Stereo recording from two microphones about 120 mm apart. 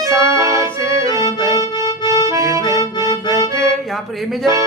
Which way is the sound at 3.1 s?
30° left (ahead or behind).